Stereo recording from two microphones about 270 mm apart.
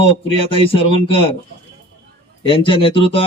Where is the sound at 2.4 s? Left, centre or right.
Centre.